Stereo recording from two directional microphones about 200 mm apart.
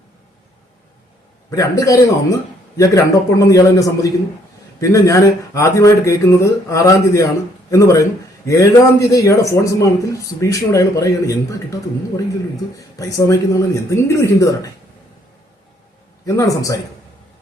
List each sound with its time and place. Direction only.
1.5 s a man's voice: 15° left (ahead or behind)
12.7 s a man's voice: 15° left (ahead or behind)
16.2 s a man's voice: 15° left (ahead or behind)